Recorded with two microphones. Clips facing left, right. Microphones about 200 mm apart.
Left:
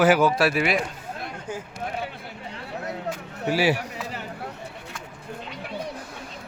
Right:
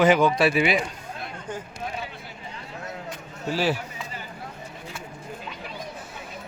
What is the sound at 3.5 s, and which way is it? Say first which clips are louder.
Speech: left 3 dB; 10° left (ahead or behind).